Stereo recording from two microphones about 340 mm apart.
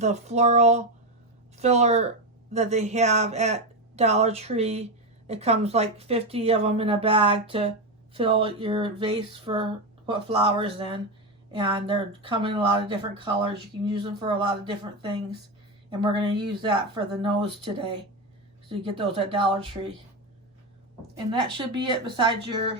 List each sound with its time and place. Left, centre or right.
0.0 s a sound: centre
1.5 s speech: centre
18.9 s speech: centre
21.6 s speech: centre